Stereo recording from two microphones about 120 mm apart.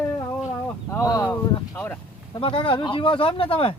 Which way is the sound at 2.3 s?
45° left (ahead or behind).